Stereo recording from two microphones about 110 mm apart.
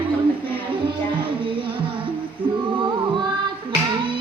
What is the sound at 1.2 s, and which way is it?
Music, 50° right (ahead or behind).